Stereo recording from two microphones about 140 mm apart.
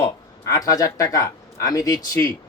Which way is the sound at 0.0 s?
25° left (ahead or behind).